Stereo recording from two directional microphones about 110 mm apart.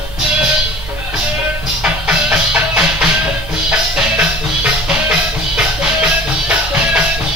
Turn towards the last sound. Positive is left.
turn(degrees=-10)  # may be behind; listen again after turning